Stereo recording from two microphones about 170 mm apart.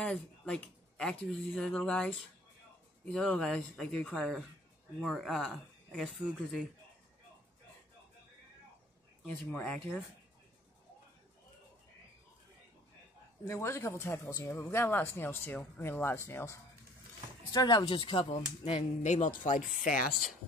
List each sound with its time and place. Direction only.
0.0 s speech: 5° left (ahead or behind)
9.2 s speech: 10° left (ahead or behind)
13.5 s speech: 15° left (ahead or behind); by 20.2 s 50° left (ahead or behind)